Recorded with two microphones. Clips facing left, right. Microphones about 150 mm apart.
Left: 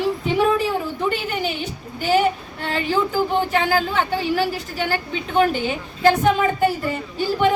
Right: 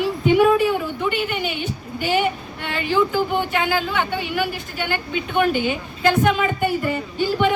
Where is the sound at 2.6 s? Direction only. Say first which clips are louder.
Right 1 dB; 35° left (ahead or behind).